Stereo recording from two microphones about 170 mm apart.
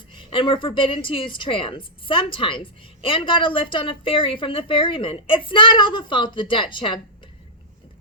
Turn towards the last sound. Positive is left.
turn(degrees=30)  # may be behind; listen again after turning